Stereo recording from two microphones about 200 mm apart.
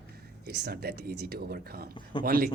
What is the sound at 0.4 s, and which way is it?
Speech, 55° right (ahead or behind).